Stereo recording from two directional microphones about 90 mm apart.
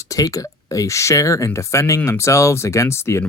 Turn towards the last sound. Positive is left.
turn(degrees=30)  # may be behind; listen again after turning